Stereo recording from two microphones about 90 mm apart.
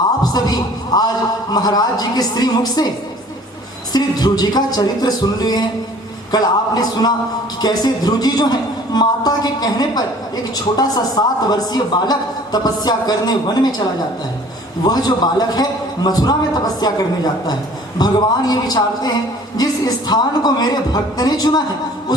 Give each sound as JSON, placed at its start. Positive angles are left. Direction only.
{"t": 0.2, "sound": "a woman's voice", "side_deg": 45}
{"t": 3.9, "sound": "a woman's voice", "side_deg": 45}
{"t": 14.8, "sound": "a woman's voice", "side_deg": 45}